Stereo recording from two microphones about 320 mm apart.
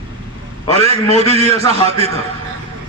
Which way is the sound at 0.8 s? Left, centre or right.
Centre.